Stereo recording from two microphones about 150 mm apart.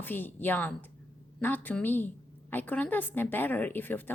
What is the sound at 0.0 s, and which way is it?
A woman's voice, 15° left (ahead or behind).